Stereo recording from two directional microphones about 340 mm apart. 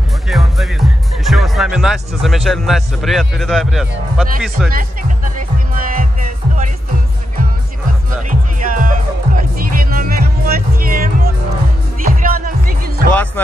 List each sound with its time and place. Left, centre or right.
0.3 s speech: centre
4.6 s music: right
8.3 s music: right